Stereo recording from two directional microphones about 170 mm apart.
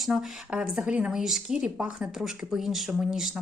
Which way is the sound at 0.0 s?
Centre (ahead or behind).